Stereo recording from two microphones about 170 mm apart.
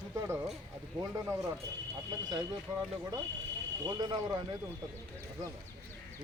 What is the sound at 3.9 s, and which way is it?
Speech, 25° right (ahead or behind).